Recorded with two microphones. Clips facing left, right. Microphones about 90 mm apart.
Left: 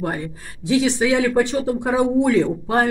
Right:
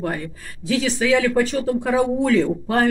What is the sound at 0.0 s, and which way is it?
Speech, 20° left (ahead or behind).